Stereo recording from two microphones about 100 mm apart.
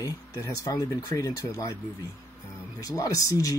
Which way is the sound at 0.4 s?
35° left (ahead or behind).